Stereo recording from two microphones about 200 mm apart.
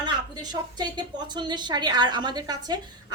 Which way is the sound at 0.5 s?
20° right (ahead or behind).